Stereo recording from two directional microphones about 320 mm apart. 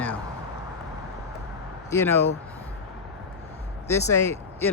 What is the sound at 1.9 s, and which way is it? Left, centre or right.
Speech, centre.